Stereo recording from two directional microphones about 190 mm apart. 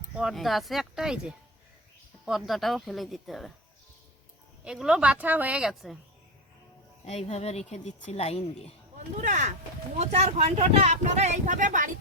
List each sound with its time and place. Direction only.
0.2 s a woman's voice: centre (ahead or behind)
4.6 s a woman's voice: 5° right (ahead or behind)
7.0 s a woman's voice: 35° left (ahead or behind)
9.2 s speech: 40° right (ahead or behind)